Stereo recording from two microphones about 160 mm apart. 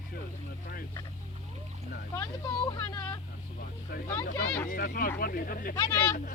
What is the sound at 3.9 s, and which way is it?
Speech, 70° left (ahead or behind).